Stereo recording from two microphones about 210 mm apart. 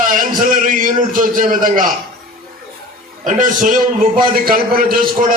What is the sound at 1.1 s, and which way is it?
Speech, 40° right (ahead or behind).